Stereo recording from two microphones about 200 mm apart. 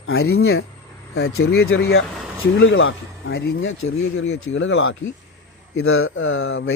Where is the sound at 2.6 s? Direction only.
80° left.